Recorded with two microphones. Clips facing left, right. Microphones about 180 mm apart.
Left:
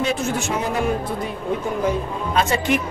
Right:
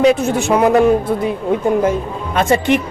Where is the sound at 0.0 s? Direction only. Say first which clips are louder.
Right 9 dB; 65° right (ahead or behind).